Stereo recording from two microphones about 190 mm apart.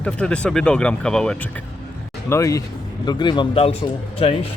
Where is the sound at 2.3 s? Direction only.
15° left (ahead or behind).